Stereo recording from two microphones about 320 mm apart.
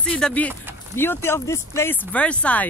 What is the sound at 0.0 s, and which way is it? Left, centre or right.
Speech, centre.